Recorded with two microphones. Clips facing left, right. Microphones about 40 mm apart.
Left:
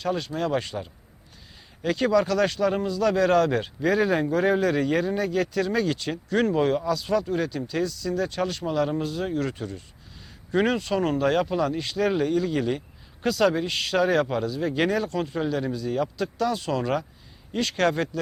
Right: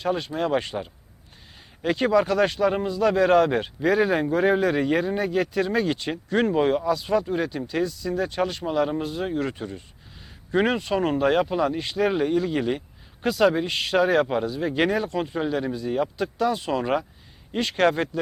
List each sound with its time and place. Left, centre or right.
0.0 s speech: centre